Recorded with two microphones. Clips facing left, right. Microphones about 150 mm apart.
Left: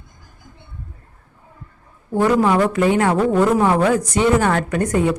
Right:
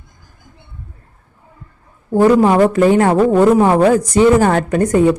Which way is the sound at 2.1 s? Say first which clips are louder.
Right 5 dB; 35° right (ahead or behind).